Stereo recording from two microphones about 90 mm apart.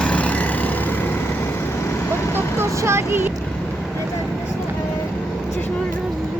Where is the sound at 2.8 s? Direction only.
30° right (ahead or behind).